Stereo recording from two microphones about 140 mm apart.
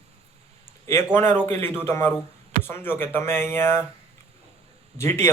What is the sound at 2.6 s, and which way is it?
Speech, 15° left (ahead or behind).